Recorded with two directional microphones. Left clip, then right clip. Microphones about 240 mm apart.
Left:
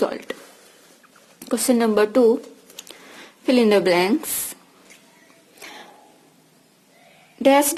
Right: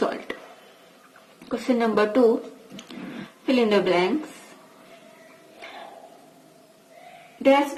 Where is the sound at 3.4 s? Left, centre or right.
Left.